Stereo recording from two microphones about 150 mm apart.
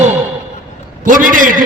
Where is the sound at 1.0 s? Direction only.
65° right (ahead or behind).